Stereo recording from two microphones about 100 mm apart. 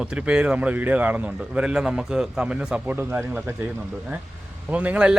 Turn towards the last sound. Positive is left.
turn(degrees=-15)  # may be behind; listen again after turning